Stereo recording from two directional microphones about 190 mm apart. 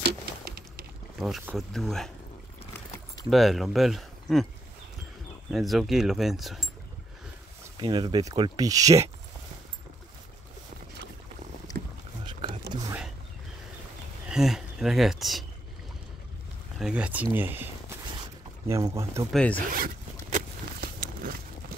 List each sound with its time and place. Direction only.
0.0 s a sound: 55° right (ahead or behind)
1.1 s speech: centre (ahead or behind)
3.3 s speech: centre (ahead or behind)
5.5 s speech: centre (ahead or behind)
7.8 s speech: 25° right (ahead or behind)
11.7 s a sound: 20° left (ahead or behind)
12.3 s roaring cats: 25° right (ahead or behind)
14.3 s speech: centre (ahead or behind)
16.7 s speech: 5° right (ahead or behind)
19.3 s speech: 5° left (ahead or behind)
19.7 s zipper: 45° right (ahead or behind)